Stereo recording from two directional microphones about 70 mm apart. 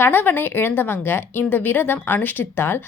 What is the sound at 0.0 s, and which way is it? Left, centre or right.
A woman's voice, left.